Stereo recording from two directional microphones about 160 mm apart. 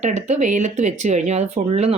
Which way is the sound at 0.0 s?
45° right (ahead or behind).